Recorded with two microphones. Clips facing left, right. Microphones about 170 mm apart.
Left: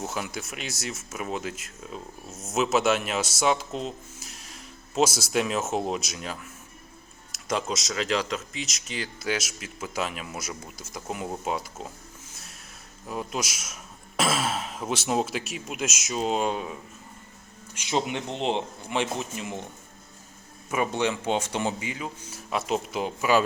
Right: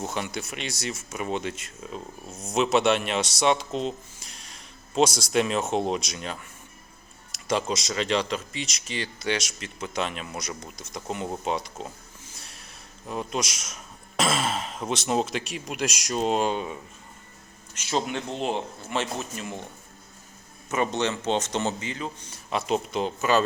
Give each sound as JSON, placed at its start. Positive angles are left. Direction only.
{"t": 0.0, "sound": "speech", "side_deg": 0}
{"t": 17.7, "sound": "speech", "side_deg": 15}
{"t": 20.7, "sound": "speech", "side_deg": 10}